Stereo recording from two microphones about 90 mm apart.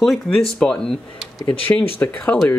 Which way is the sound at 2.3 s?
10° left (ahead or behind).